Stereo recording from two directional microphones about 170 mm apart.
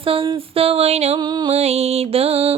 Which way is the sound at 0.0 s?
35° right (ahead or behind).